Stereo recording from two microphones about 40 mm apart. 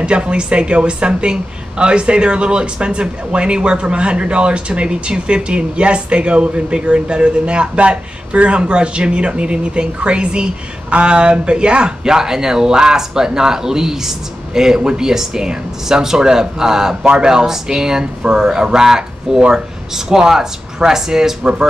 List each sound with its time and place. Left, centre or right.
0.0 s speech: right